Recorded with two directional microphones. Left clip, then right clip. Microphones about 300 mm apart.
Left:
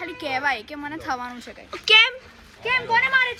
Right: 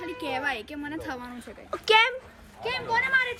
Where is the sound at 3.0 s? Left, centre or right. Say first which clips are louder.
Left 3 dB; centre.